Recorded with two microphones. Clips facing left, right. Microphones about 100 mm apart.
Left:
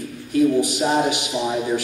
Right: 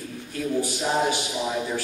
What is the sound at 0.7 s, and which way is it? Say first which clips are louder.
Speech: left 4 dB; 15° left (ahead or behind).